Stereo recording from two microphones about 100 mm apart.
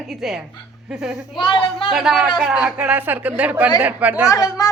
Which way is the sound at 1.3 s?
60° left (ahead or behind).